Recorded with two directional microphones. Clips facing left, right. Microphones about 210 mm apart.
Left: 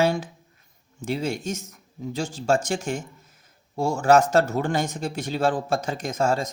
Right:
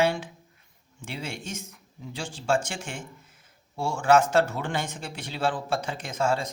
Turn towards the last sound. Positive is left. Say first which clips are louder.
# left 3 dB
turn(degrees=40)  # may be behind; listen again after turning